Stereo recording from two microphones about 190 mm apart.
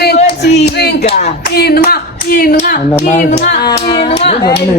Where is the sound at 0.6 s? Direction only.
60° left (ahead or behind).